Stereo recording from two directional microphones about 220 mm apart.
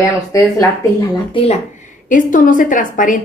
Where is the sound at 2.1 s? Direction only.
35° left (ahead or behind).